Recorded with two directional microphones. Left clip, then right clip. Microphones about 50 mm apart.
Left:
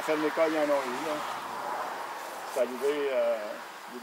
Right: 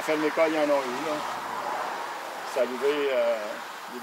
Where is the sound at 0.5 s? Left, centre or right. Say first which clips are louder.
Right 3 dB; centre.